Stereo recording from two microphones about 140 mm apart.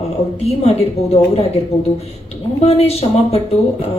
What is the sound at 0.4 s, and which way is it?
A woman's voice, 45° left (ahead or behind).